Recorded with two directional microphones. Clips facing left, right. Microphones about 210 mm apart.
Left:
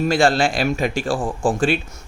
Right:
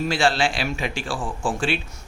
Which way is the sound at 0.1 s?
45° left (ahead or behind).